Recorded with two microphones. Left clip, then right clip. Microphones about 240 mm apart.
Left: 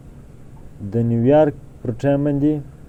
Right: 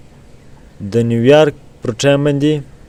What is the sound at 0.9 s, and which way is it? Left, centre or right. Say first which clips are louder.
Speech: right 6 dB; right.